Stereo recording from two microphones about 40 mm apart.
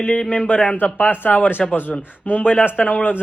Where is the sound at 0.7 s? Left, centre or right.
Left.